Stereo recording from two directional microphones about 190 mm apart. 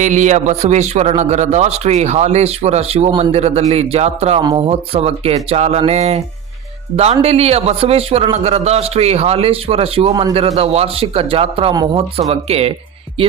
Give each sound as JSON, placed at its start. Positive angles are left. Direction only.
{"t": 0.0, "sound": "a man's voice", "side_deg": -40}